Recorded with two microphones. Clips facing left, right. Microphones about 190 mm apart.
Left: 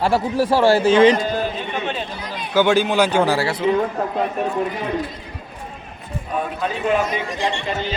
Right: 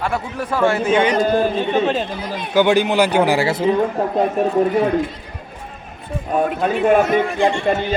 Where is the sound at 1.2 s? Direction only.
45° right (ahead or behind).